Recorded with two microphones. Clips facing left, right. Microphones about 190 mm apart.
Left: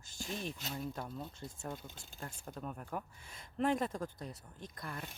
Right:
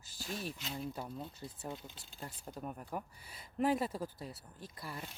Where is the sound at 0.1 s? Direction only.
5° right (ahead or behind).